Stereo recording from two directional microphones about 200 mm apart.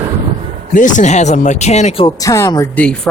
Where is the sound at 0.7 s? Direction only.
40° left (ahead or behind).